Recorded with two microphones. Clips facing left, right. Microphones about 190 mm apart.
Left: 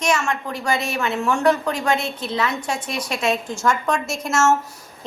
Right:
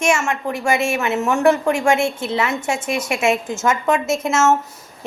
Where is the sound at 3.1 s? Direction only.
10° right (ahead or behind).